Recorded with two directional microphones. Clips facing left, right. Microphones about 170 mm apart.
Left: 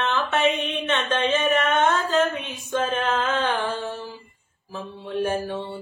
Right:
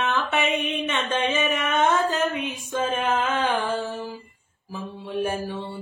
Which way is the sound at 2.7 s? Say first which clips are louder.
Left 1 dB; 10° right (ahead or behind).